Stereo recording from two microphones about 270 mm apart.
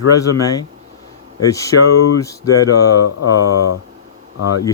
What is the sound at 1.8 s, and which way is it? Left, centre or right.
Speech, left.